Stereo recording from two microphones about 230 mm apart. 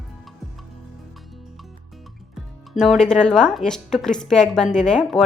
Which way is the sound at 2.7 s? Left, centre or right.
Centre.